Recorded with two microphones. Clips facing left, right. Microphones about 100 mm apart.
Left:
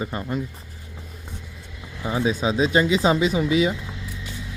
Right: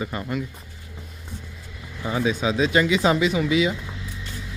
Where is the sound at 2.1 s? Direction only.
30° left (ahead or behind).